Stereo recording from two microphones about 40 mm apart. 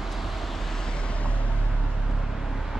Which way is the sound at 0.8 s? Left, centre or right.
Left.